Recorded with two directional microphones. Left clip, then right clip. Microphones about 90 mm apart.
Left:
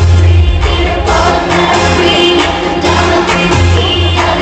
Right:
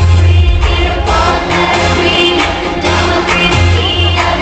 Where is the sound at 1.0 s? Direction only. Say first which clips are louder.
Left 2 dB; 10° left (ahead or behind).